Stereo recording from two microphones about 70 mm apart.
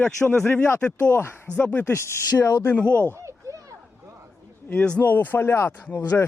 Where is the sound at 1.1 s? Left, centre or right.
Left.